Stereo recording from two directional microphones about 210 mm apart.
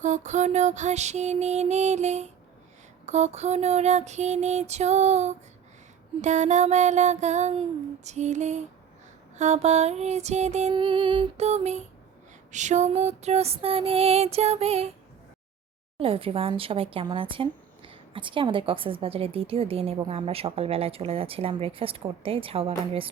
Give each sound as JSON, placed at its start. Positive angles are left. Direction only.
{"t": 0.0, "sound": "music", "side_deg": -35}
{"t": 12.5, "sound": "speech", "side_deg": -35}
{"t": 16.0, "sound": "speech", "side_deg": -25}